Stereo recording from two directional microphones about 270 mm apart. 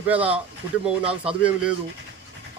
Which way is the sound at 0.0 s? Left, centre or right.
Centre.